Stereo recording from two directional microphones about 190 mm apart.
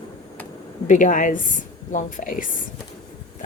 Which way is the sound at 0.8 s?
40° left (ahead or behind).